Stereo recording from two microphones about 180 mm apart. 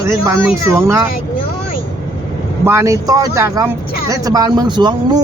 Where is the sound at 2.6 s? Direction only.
15° right (ahead or behind).